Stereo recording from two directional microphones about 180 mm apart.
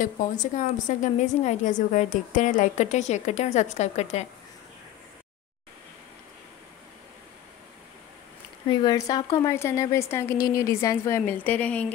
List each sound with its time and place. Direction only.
0.0 s a woman's voice: 45° left (ahead or behind)
8.6 s speech: 20° left (ahead or behind)